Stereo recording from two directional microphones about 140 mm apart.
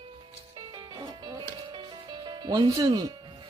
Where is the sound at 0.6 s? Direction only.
30° right (ahead or behind).